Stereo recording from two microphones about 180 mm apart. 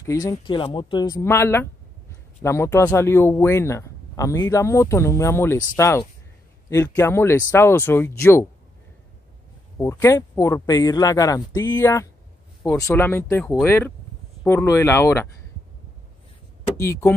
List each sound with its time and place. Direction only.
0.0 s speech: 20° left (ahead or behind)
9.8 s speech: 15° left (ahead or behind)
16.7 s speech: 15° left (ahead or behind)